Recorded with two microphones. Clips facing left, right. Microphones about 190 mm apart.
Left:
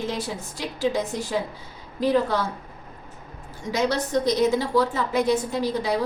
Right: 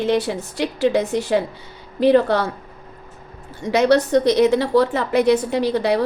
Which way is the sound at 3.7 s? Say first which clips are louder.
Right 8 dB; 70° right (ahead or behind).